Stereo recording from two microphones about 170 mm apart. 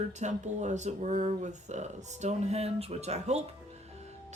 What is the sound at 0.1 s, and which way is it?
Speech, 45° right (ahead or behind).